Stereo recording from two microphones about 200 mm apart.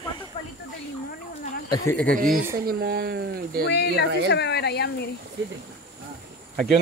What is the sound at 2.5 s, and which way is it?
Speech, 50° right (ahead or behind).